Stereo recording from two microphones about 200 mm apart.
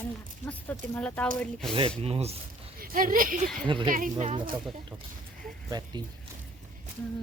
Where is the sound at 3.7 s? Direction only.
25° right (ahead or behind).